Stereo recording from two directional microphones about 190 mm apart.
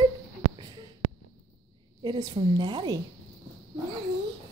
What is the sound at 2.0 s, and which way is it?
Speech, 25° right (ahead or behind).